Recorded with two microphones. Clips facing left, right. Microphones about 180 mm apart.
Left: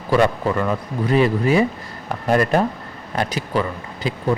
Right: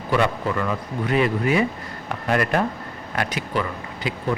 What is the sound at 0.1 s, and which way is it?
Speech, 35° left (ahead or behind).